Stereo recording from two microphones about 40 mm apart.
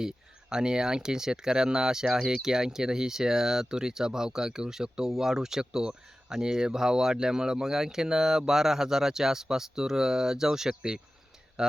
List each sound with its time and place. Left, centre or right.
0.5 s speech: centre